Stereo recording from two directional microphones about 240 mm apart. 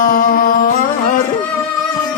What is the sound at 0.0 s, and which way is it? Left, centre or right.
Music, left.